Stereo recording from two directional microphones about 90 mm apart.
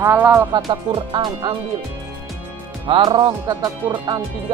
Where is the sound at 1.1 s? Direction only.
70° right (ahead or behind).